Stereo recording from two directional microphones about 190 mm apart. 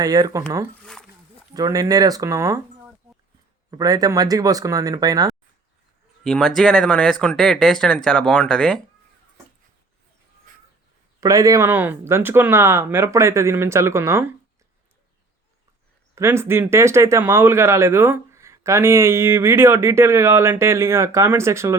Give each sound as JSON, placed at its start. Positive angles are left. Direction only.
{"t": 0.0, "sound": "speech", "side_deg": -20}
{"t": 0.8, "sound": "zipper", "side_deg": 5}
{"t": 1.5, "sound": "speech", "side_deg": -20}
{"t": 6.2, "sound": "speech", "side_deg": 5}
{"t": 11.2, "sound": "speech", "side_deg": -15}
{"t": 16.1, "sound": "speech", "side_deg": -15}